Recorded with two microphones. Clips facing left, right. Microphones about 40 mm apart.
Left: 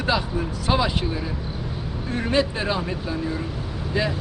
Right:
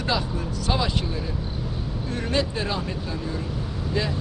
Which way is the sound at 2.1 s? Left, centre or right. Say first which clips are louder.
Left 4 dB; centre.